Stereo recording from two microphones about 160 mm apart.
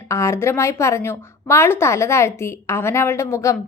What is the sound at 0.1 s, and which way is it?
A woman's voice, 15° left (ahead or behind).